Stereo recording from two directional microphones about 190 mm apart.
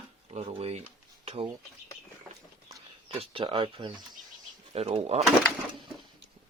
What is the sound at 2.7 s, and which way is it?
Speech, 30° right (ahead or behind).